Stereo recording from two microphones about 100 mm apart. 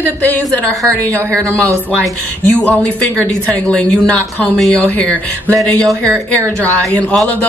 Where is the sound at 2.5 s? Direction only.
10° left (ahead or behind).